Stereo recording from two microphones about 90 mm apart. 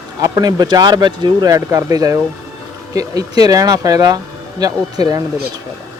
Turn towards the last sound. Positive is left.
turn(degrees=-45)  # may be behind; listen again after turning